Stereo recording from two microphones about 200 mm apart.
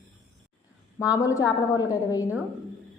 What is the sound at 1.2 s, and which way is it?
A woman's voice, 15° left (ahead or behind).